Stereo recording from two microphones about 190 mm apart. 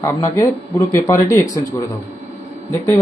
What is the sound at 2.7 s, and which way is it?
Speech, 15° left (ahead or behind).